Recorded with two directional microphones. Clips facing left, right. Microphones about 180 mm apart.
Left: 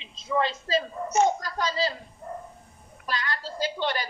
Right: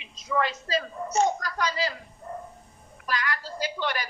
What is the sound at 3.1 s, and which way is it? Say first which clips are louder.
Speech: right 1 dB; 30° left (ahead or behind).